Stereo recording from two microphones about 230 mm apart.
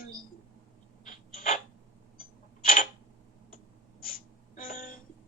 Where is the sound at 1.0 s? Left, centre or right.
Left.